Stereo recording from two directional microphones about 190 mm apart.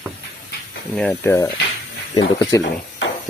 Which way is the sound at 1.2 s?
15° left (ahead or behind).